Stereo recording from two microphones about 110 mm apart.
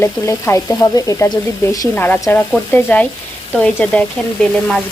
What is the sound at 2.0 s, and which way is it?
Speech, 20° left (ahead or behind).